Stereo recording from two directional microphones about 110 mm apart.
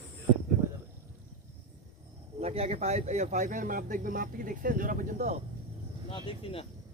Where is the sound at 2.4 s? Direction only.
70° right (ahead or behind); by 3.5 s 90° right.